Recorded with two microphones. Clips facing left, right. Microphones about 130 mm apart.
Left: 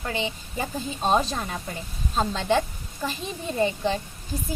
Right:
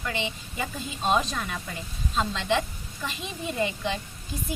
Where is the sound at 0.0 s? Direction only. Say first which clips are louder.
Left 2 dB; 35° left (ahead or behind).